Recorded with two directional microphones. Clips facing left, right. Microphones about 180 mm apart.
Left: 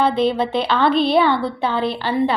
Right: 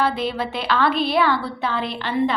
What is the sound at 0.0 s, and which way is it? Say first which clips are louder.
A woman's voice: left 5 dB; 25° left (ahead or behind).